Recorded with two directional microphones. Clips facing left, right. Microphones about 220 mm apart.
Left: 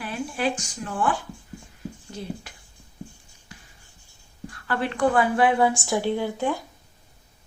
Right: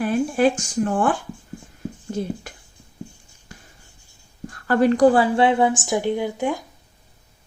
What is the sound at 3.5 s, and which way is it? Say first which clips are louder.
Writing: right 3 dB; 45° right (ahead or behind).